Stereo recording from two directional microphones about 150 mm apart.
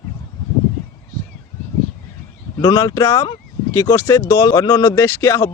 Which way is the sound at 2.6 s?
25° left (ahead or behind).